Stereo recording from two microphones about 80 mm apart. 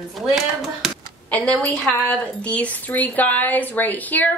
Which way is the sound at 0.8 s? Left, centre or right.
Centre.